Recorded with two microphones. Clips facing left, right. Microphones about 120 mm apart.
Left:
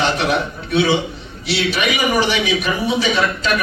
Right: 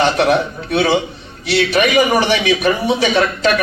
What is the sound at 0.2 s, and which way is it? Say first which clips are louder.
Speech: right 5 dB; 60° right (ahead or behind).